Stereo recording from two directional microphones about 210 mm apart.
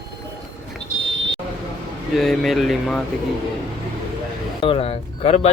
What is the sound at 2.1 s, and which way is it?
Speech, centre (ahead or behind).